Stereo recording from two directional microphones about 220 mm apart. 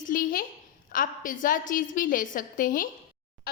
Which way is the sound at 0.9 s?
40° left (ahead or behind).